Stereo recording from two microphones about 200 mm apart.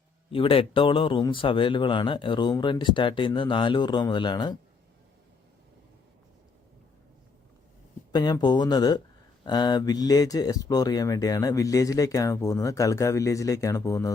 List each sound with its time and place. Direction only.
0.3 s speech: 25° left (ahead or behind)
8.1 s speech: 20° left (ahead or behind)